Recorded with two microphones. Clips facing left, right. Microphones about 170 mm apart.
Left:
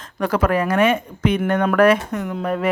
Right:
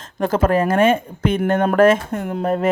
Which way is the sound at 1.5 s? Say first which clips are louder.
Right 2 dB; 40° right (ahead or behind).